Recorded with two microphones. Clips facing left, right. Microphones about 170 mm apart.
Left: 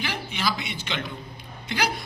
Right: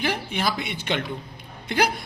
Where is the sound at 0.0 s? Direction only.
55° right (ahead or behind).